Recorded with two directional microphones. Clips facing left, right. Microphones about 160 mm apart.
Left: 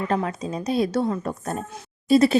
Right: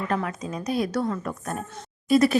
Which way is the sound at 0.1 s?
30° left (ahead or behind).